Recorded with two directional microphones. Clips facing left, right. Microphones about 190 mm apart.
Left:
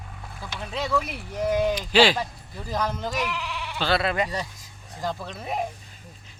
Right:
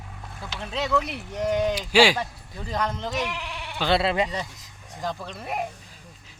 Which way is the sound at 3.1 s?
20° right (ahead or behind).